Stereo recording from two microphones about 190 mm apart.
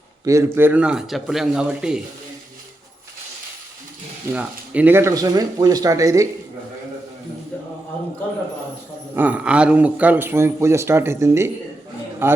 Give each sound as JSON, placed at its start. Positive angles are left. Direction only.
{"t": 0.3, "sound": "speech", "side_deg": -15}
{"t": 4.4, "sound": "speech", "side_deg": -5}
{"t": 9.1, "sound": "speech", "side_deg": -10}